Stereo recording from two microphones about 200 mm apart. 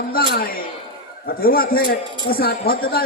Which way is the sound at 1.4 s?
50° left (ahead or behind).